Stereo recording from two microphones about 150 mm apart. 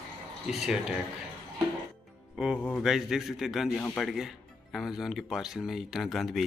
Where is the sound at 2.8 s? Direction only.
5° right (ahead or behind).